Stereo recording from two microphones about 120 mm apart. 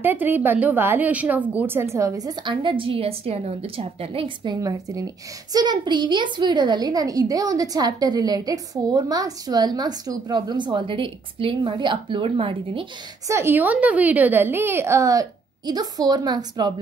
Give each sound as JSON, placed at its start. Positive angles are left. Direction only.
{"t": 0.0, "sound": "a woman's voice", "side_deg": -15}
{"t": 4.6, "sound": "a woman's voice", "side_deg": -30}
{"t": 13.3, "sound": "a woman's voice", "side_deg": -20}